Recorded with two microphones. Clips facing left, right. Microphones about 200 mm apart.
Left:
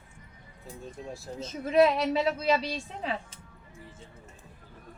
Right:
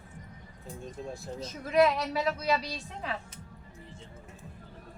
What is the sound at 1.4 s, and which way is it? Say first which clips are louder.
A woman's voice: left 2 dB; 25° left (ahead or behind).